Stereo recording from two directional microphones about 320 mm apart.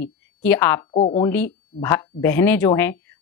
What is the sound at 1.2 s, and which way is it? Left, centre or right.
A woman's voice, centre.